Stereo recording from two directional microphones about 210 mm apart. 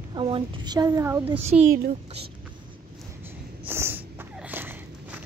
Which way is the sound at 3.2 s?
10° right (ahead or behind).